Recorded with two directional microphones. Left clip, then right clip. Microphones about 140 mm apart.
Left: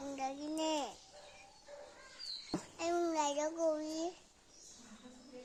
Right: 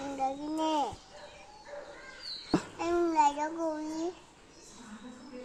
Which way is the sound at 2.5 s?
5° left (ahead or behind).